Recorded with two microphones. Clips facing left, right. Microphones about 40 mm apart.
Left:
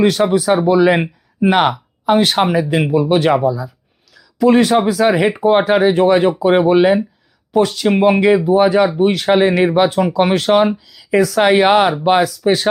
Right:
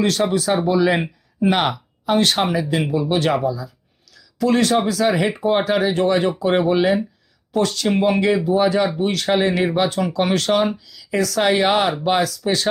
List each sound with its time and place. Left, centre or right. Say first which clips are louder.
0.0 s speech: left 5 dB; centre